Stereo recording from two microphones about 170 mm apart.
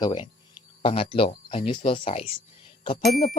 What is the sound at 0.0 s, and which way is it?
Speech, 25° left (ahead or behind).